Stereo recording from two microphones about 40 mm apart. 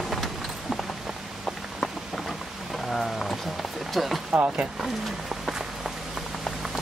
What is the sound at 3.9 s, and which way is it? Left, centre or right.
Speech, centre.